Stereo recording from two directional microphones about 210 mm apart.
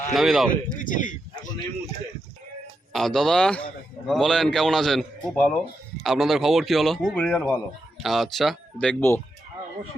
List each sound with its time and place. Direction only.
0.1 s a man's voice: centre (ahead or behind)
0.8 s speech: 40° left (ahead or behind)
2.9 s a man's voice: centre (ahead or behind)